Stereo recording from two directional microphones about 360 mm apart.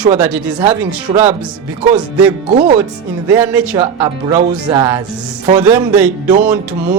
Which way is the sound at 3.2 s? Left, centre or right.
Centre.